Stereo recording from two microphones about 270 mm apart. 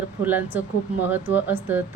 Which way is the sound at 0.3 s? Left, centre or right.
Centre.